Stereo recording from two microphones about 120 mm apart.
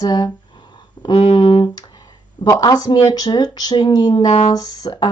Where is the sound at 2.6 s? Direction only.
35° left (ahead or behind).